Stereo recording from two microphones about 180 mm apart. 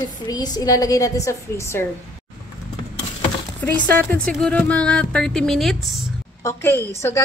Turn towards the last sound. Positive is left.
turn(degrees=15)  # may be behind; listen again after turning